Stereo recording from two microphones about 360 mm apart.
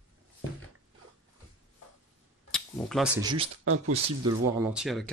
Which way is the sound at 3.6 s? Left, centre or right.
Right.